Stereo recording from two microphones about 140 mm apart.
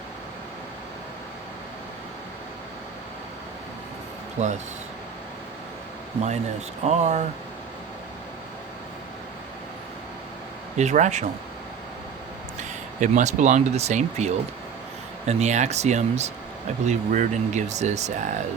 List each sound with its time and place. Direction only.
4.4 s speech: 55° right (ahead or behind)
6.8 s speech: 55° right (ahead or behind)
10.8 s speech: 55° right (ahead or behind)
12.5 s speech: 60° right (ahead or behind)